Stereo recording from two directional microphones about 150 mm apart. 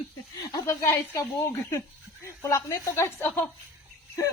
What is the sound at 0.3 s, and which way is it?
Speech, 25° left (ahead or behind).